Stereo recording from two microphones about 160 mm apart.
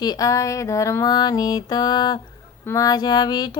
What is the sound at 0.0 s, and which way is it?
Mantra, 25° left (ahead or behind).